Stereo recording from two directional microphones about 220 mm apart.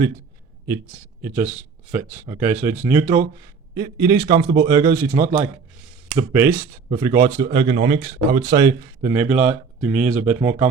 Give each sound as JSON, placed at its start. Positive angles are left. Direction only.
{"t": 0.7, "sound": "speech", "side_deg": -10}
{"t": 7.5, "sound": "speech", "side_deg": -25}